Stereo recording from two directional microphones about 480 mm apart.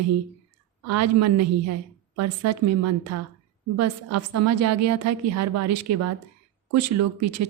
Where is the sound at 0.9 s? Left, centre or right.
Right.